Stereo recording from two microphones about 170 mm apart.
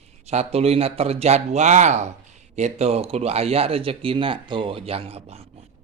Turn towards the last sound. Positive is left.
turn(degrees=-35)  # may be behind; listen again after turning